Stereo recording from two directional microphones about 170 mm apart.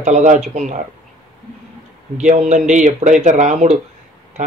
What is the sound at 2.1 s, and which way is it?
Speech, 45° right (ahead or behind).